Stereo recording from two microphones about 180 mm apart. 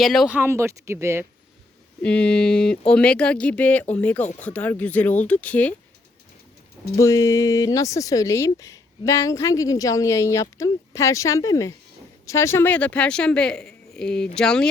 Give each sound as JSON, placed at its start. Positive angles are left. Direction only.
{"t": 0.0, "sound": "speech", "side_deg": 0}
{"t": 2.0, "sound": "speech", "side_deg": 5}
{"t": 4.2, "sound": "speech", "side_deg": 40}
{"t": 4.4, "sound": "speech", "side_deg": 10}
{"t": 7.0, "sound": "speech", "side_deg": 20}